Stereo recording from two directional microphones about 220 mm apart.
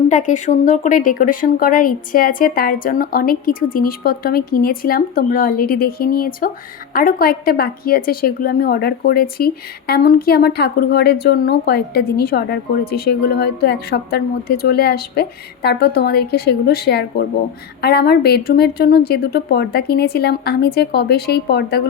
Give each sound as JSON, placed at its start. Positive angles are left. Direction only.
{"t": 0.1, "sound": "a woman's voice", "side_deg": 35}